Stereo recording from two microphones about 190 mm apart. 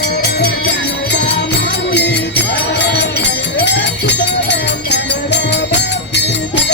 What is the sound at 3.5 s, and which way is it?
Music, 65° left (ahead or behind).